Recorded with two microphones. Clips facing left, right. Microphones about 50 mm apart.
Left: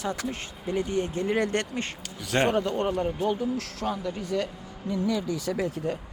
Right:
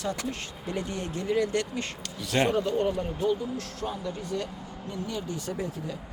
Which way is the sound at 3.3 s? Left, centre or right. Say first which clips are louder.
Left 1 dB; left.